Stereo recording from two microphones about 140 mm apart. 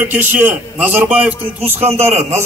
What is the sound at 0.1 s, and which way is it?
A man's voice, 15° right (ahead or behind).